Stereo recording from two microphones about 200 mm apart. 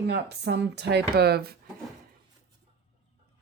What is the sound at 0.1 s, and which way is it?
Speech, 55° right (ahead or behind).